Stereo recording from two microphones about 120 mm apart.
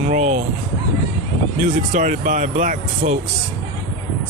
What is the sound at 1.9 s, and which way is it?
Speech, 90° right.